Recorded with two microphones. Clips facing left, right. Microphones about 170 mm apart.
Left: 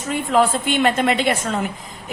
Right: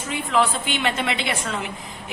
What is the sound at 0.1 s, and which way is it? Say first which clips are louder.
A woman's voice: left 4 dB; 45° left (ahead or behind).